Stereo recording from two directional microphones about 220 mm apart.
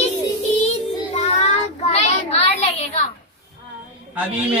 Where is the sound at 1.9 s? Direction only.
30° left (ahead or behind).